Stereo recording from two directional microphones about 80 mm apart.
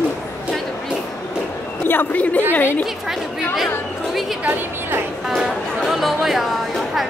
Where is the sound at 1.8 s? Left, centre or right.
Left.